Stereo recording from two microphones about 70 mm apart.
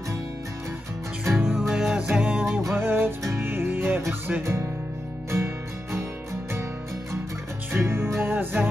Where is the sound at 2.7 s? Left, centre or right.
Right.